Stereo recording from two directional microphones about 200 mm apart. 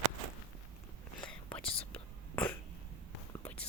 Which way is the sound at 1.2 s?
5° left (ahead or behind).